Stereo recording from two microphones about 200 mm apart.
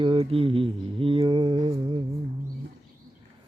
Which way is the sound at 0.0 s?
30° right (ahead or behind).